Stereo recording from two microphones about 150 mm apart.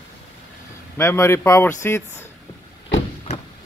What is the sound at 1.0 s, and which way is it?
Speech, 15° left (ahead or behind).